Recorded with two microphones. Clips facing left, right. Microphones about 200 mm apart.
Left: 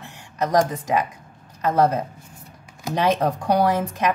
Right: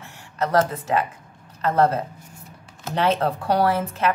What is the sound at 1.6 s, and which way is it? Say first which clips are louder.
Speech: even; 10° left (ahead or behind).